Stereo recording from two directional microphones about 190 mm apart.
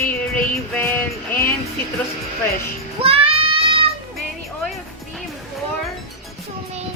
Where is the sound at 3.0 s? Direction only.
30° right (ahead or behind).